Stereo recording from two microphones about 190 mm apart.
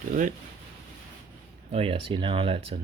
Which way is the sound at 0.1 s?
45° right (ahead or behind).